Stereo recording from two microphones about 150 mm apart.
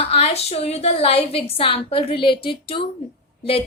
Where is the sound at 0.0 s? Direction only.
40° left (ahead or behind).